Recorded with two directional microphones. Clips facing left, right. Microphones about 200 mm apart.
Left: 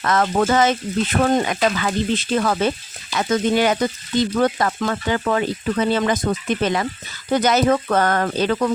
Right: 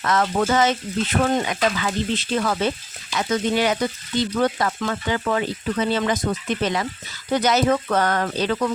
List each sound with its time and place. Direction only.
0.0 s speech: 50° left (ahead or behind)